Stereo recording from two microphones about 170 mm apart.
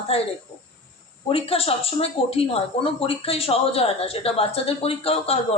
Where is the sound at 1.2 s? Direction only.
35° left (ahead or behind).